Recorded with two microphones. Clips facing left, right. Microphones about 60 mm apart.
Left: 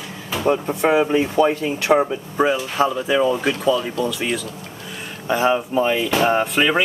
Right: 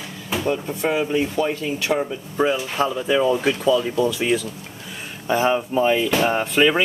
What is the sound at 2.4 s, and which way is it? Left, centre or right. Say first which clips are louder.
Speech: left 2 dB; centre.